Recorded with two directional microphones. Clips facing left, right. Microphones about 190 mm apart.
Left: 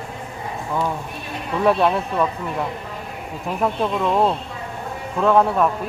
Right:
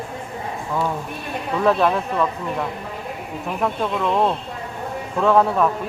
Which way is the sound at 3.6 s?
5° left (ahead or behind).